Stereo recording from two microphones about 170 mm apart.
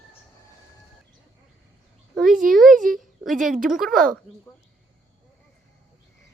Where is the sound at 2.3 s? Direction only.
55° right (ahead or behind).